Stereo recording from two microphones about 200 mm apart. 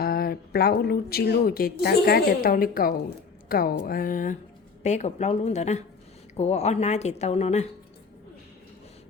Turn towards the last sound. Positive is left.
turn(degrees=35)  # may be behind; listen again after turning